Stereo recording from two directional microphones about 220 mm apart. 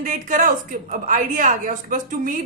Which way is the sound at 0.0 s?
35° right (ahead or behind).